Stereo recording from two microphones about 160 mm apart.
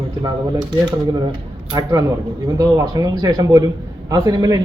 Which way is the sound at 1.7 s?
20° right (ahead or behind).